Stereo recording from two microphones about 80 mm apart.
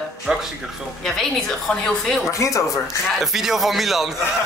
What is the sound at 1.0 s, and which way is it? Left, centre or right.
A woman's voice, centre.